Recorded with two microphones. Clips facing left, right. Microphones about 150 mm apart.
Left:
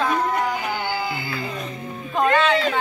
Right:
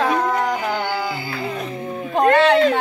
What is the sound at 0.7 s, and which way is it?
Music, 60° right (ahead or behind).